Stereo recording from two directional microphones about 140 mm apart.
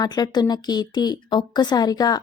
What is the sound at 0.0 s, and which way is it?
A woman's voice, 30° left (ahead or behind).